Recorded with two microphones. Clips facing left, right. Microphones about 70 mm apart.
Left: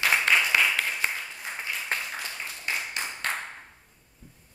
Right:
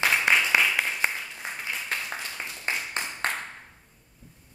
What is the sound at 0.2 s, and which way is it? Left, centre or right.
Applause, centre.